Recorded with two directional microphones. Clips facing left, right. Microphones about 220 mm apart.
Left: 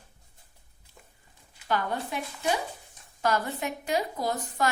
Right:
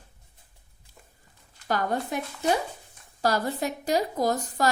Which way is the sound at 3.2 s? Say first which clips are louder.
Right 2 dB; 35° right (ahead or behind).